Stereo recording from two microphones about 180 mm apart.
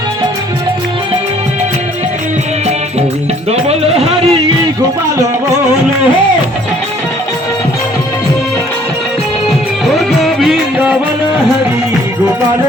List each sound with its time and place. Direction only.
3.5 s music: 35° right (ahead or behind)
9.8 s music: centre (ahead or behind)